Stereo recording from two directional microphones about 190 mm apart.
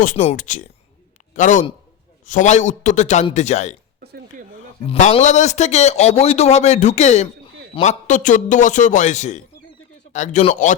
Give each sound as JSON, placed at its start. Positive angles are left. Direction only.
{"t": 0.3, "sound": "a man's voice", "side_deg": 40}
{"t": 4.0, "sound": "speech", "side_deg": -60}
{"t": 4.9, "sound": "a man's voice", "side_deg": 35}